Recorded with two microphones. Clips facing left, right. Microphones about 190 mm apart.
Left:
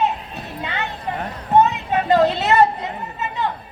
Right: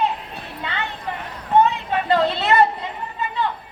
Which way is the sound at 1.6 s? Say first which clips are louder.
Left 1 dB; 20° left (ahead or behind).